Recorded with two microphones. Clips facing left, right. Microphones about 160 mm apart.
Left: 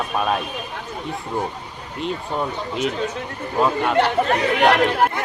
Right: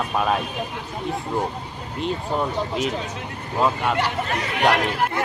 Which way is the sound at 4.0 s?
60° left (ahead or behind).